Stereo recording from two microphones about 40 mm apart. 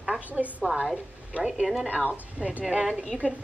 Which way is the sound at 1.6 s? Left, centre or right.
Centre.